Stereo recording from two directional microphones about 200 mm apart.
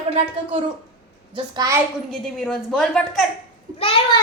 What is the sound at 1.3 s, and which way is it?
Speech, 20° right (ahead or behind).